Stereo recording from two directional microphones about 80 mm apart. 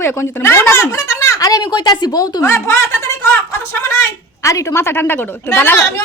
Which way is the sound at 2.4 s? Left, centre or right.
Left.